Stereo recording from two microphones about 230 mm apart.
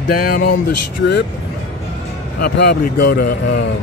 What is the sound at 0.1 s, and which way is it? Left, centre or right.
Speech, left.